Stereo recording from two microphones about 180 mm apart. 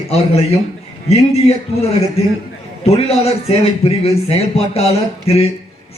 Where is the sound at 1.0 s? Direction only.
35° left (ahead or behind).